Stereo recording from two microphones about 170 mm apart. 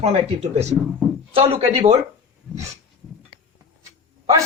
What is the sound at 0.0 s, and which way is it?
Speech, 40° right (ahead or behind).